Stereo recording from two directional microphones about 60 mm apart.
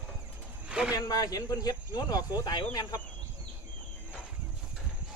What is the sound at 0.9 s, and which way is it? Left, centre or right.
Speech, left.